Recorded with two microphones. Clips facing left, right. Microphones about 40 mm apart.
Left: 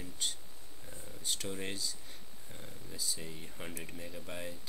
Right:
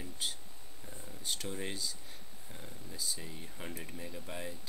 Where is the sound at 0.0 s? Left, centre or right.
Centre.